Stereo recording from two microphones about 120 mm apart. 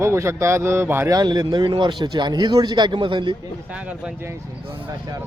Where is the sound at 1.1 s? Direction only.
35° right (ahead or behind).